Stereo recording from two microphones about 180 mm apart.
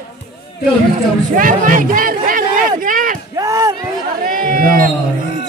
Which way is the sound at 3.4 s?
15° right (ahead or behind).